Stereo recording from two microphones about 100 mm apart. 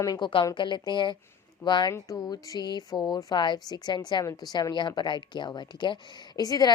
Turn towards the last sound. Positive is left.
turn(degrees=40)  # may be behind; listen again after turning